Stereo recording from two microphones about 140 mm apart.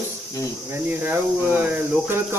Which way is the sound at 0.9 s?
15° right (ahead or behind).